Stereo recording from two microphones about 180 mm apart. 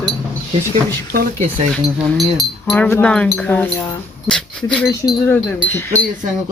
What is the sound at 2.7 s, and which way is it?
Speech, 10° left (ahead or behind).